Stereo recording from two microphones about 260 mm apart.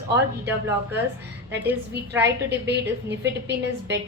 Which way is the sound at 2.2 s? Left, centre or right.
Right.